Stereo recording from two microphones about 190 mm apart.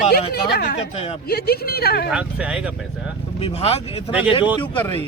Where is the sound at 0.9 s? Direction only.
30° left (ahead or behind).